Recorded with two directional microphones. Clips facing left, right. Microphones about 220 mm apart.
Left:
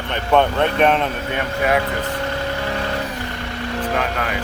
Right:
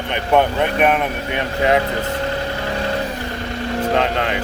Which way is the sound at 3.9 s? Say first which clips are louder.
Right 5 dB; 25° right (ahead or behind).